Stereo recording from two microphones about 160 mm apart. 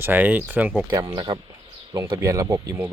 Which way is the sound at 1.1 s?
25° right (ahead or behind).